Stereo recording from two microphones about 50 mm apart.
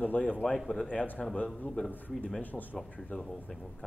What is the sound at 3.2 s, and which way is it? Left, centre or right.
Speech, centre.